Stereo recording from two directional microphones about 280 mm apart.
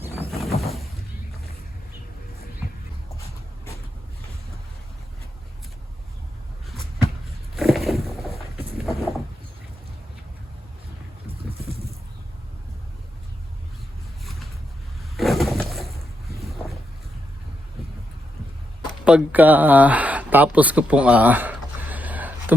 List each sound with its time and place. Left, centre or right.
0.3 s a sound: centre
6.7 s a sound: centre
8.8 s vehicle: centre
14.3 s vehicle: centre
15.1 s pigeon: centre
16.4 s boat: centre
19.0 s speech: centre